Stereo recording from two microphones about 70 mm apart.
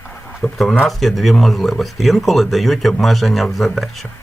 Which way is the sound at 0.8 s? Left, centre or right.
Centre.